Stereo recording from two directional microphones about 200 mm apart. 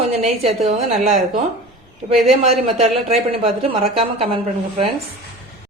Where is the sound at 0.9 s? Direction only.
35° right (ahead or behind).